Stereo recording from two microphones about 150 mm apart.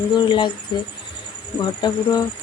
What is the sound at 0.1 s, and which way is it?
Speech, 30° left (ahead or behind).